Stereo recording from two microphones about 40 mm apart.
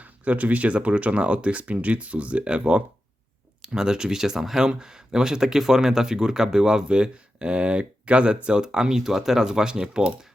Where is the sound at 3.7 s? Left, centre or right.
Centre.